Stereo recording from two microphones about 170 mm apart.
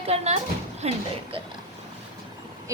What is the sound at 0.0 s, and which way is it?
Speech, 35° right (ahead or behind).